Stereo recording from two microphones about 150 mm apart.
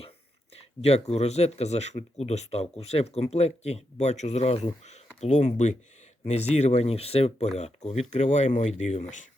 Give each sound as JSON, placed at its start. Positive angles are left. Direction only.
{"t": 0.5, "sound": "speech", "side_deg": 45}